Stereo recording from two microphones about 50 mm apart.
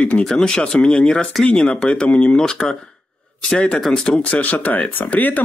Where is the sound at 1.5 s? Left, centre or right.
Left.